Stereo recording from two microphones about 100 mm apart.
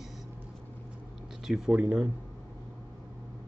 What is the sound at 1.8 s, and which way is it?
Speech, 15° right (ahead or behind).